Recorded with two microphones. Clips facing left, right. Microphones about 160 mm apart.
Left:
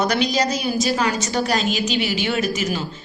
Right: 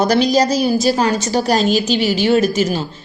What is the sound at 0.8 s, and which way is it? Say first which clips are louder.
A woman's voice: right 5 dB; 35° right (ahead or behind).